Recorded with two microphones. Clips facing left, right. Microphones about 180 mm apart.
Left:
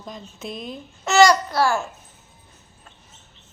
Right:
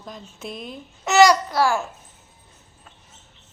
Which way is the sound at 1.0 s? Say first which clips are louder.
Even; 20° right (ahead or behind).